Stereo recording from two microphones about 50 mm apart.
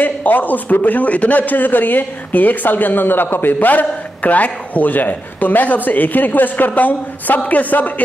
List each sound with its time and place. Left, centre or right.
0.0 s a man's voice: left